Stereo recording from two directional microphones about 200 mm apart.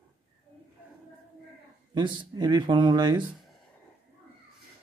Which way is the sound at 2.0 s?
20° right (ahead or behind).